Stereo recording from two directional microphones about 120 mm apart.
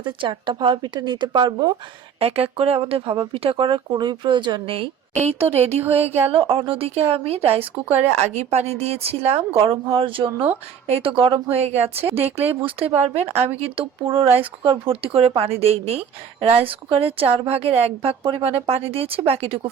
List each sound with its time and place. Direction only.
0.0 s a woman's voice: 45° right (ahead or behind)
2.1 s speech: 55° right (ahead or behind)
5.2 s speech: 60° right (ahead or behind)
6.3 s speech: 50° right (ahead or behind)
9.6 s speech: 45° right (ahead or behind)